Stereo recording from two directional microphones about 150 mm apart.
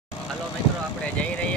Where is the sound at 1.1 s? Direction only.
5° left (ahead or behind).